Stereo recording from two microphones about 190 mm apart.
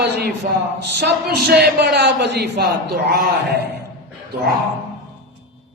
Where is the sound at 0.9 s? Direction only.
55° right (ahead or behind).